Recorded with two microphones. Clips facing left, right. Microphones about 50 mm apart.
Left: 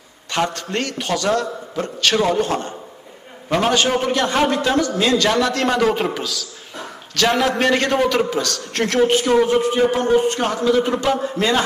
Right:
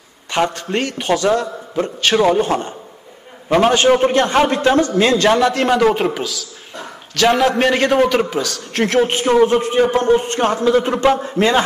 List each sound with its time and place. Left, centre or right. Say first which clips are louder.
0.3 s a man's voice: right 3 dB; centre; by 5.4 s right
5.4 s a man's voice: right 4 dB; centre
9.0 s a man's voice: left 1 dB; right